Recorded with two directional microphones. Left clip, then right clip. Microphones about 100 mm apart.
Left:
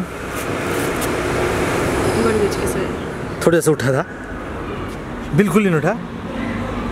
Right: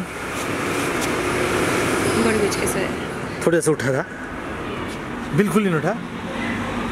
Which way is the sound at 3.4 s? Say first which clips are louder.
Left 4 dB; 20° left (ahead or behind).